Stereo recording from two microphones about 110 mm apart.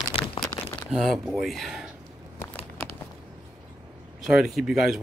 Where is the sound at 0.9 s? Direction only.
Centre (ahead or behind).